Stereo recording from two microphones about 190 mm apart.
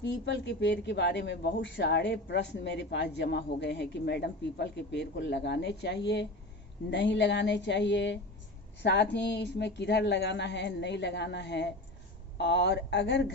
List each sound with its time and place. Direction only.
0.0 s speech: 70° left (ahead or behind)